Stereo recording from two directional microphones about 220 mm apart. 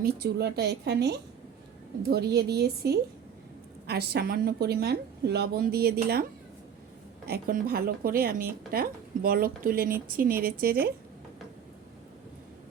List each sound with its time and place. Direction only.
0.0 s a woman's voice: 45° right (ahead or behind)
7.3 s a woman's voice: 45° right (ahead or behind)